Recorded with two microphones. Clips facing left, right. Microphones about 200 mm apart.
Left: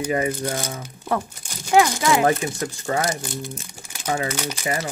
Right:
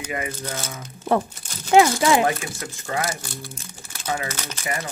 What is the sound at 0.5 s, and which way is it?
Speech, 15° left (ahead or behind).